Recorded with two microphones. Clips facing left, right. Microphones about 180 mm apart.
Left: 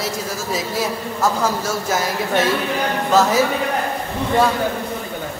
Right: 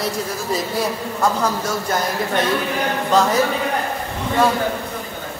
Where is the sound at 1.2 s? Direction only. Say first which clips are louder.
Even; 5° left (ahead or behind).